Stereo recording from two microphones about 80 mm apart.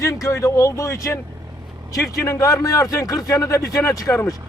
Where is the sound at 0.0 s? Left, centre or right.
Left.